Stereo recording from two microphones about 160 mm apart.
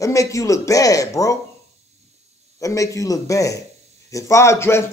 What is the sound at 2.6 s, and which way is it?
A man's voice, 20° left (ahead or behind).